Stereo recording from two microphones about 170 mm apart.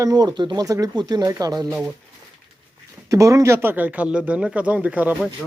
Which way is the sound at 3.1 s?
20° right (ahead or behind).